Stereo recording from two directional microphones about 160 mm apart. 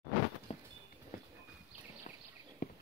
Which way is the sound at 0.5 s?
40° left (ahead or behind).